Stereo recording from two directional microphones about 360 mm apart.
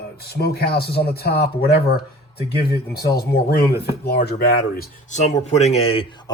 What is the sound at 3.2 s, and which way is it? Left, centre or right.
Speech, left.